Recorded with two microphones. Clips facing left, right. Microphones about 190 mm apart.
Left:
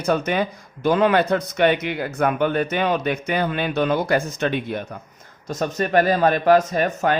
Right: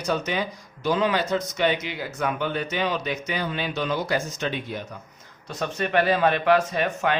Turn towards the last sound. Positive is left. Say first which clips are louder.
# left 4 dB
turn(degrees=45)  # may be behind; listen again after turning